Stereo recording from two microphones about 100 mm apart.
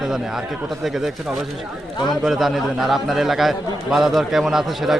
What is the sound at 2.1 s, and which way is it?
A man's voice, centre (ahead or behind).